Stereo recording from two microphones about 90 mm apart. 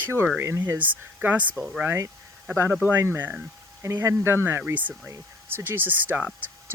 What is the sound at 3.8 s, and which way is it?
Speech, 35° right (ahead or behind).